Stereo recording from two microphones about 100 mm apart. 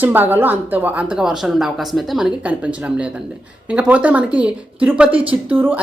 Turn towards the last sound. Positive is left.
turn(degrees=-20)  # may be behind; listen again after turning